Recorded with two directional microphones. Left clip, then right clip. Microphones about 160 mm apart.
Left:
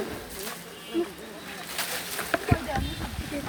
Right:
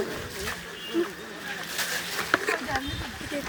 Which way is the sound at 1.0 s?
30° right (ahead or behind).